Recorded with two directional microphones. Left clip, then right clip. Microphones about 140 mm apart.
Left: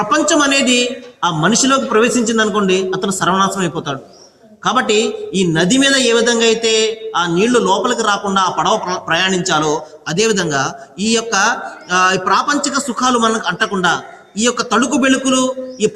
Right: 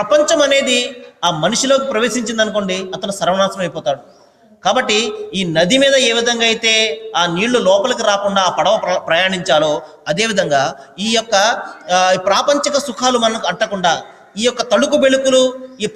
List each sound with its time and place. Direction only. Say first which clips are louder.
0.0 s a man's voice: right 1 dB; 45° right (ahead or behind)